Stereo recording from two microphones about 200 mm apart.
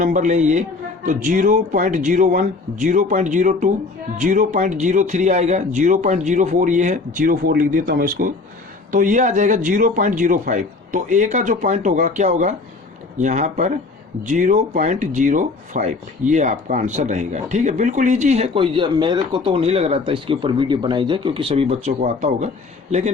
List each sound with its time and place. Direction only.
0.0 s speech: 40° right (ahead or behind)